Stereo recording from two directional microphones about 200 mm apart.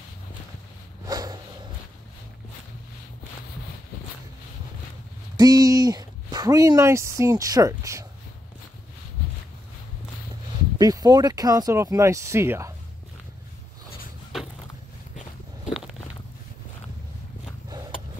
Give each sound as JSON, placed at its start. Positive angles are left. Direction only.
{"t": 1.0, "sound": "a sound", "side_deg": -20}
{"t": 5.4, "sound": "speech", "side_deg": -20}
{"t": 10.8, "sound": "speech", "side_deg": -20}